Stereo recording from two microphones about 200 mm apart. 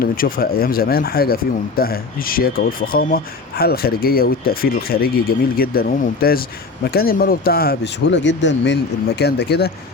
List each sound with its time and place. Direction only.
0.0 s speech: 45° left (ahead or behind)